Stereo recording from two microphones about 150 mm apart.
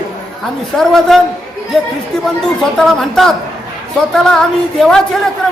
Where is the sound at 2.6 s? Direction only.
5° left (ahead or behind).